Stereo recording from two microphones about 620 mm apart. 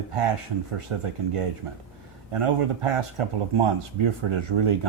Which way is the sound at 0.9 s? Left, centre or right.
Right.